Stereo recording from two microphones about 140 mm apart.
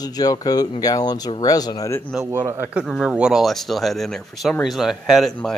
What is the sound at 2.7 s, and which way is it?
Speech, 5° right (ahead or behind).